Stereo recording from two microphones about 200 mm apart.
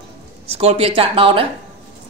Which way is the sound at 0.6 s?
30° right (ahead or behind).